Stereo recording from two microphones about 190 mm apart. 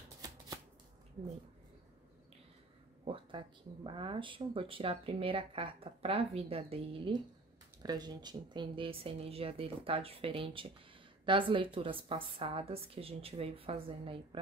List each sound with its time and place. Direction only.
3.1 s speech: 25° right (ahead or behind)